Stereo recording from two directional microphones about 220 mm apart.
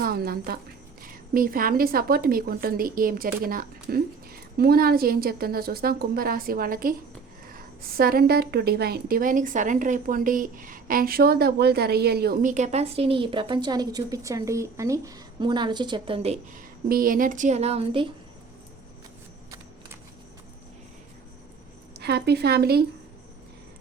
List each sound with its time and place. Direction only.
0.0 s a woman's voice: 45° right (ahead or behind); by 16.6 s 30° right (ahead or behind)
16.9 s a woman's voice: 40° right (ahead or behind); by 18.1 s 25° right (ahead or behind)
21.9 s a woman's voice: 50° right (ahead or behind)